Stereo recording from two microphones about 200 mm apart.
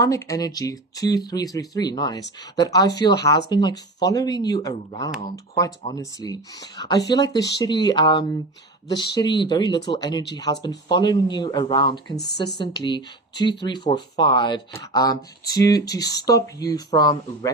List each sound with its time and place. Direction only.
0.0 s speech: 15° left (ahead or behind)